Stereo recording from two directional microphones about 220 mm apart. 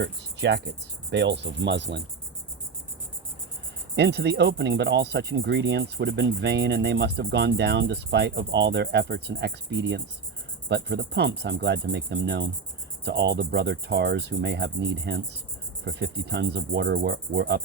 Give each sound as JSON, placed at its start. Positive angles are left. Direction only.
{"t": 0.0, "sound": "speech", "side_deg": -55}
{"t": 3.9, "sound": "speech", "side_deg": -50}